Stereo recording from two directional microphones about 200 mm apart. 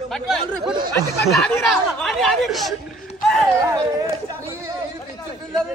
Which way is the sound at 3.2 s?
Centre (ahead or behind).